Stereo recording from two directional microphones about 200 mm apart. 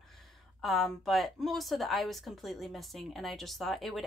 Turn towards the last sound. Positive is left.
turn(degrees=0)  # may be behind; listen again after turning